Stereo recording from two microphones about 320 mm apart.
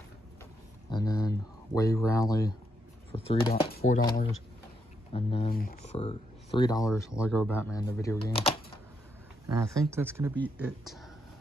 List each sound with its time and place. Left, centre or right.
0.8 s a sound: centre
1.8 s speech: centre
3.9 s speech: left
9.5 s speech: centre